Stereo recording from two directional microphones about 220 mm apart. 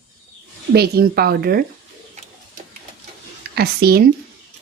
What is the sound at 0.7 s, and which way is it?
Speech, 45° right (ahead or behind).